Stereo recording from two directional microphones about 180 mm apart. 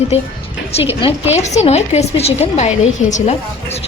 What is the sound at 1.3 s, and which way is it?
Speech, 40° left (ahead or behind).